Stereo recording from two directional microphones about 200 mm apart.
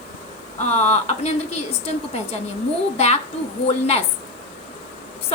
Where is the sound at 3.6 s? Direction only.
30° left (ahead or behind).